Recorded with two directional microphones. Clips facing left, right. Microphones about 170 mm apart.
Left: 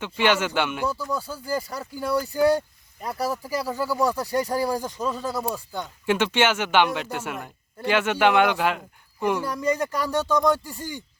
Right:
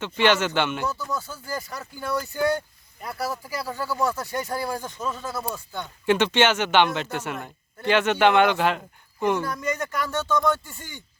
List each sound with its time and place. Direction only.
0.0 s speech: 10° left (ahead or behind)
1.1 s speech: 35° left (ahead or behind)
3.2 s speech: 15° left (ahead or behind)
4.9 s speech: 35° left (ahead or behind)
5.8 s speech: 5° left (ahead or behind)
9.5 s speech: 35° left (ahead or behind)